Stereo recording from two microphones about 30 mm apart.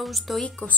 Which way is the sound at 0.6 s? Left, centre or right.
Left.